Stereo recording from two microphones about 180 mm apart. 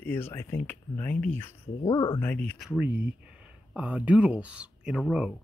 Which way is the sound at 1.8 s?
25° left (ahead or behind).